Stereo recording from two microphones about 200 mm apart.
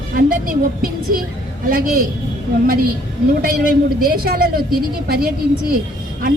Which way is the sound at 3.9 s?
50° right (ahead or behind).